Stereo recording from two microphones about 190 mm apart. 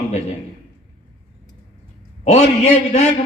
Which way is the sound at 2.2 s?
35° left (ahead or behind).